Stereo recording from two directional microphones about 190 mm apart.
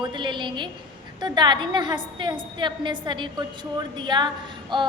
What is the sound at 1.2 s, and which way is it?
A woman's voice, 25° right (ahead or behind).